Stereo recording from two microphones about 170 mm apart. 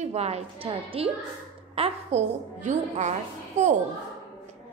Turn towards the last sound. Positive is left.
turn(degrees=-45)  # may be behind; listen again after turning